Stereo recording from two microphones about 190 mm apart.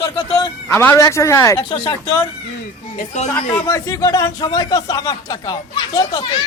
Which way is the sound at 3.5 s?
15° left (ahead or behind).